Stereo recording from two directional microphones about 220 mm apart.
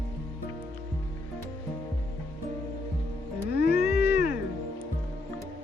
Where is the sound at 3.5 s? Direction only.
45° left (ahead or behind).